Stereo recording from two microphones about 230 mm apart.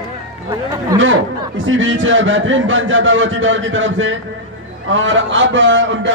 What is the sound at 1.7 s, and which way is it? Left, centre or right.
A man's voice, right.